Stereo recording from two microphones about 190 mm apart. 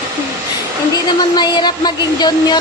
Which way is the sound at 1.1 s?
25° left (ahead or behind).